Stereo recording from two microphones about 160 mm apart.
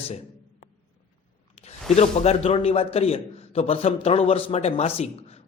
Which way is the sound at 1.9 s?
40° left (ahead or behind).